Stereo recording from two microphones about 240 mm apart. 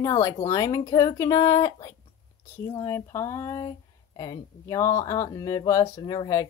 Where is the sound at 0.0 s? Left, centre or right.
Centre.